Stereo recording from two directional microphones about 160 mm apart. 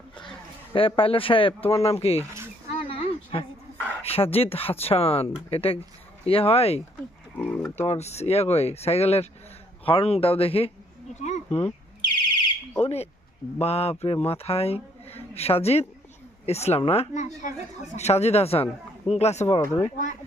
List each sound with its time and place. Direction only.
0.2 s speech: 30° left (ahead or behind)
2.7 s a sound: 35° left (ahead or behind)
4.0 s speech: 40° left (ahead or behind)
7.3 s speech: 5° left (ahead or behind)
7.9 s speech: 45° left (ahead or behind)
12.8 s speech: 40° left (ahead or behind)